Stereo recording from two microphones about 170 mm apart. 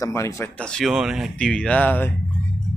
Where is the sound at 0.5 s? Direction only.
5° left (ahead or behind).